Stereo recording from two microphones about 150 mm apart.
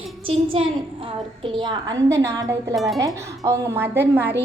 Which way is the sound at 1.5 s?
30° right (ahead or behind).